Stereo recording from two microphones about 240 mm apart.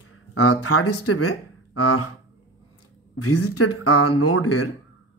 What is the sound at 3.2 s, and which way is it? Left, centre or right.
Speech, left.